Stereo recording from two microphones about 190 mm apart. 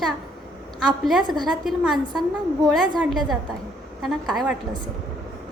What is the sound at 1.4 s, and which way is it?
A woman's voice, centre (ahead or behind).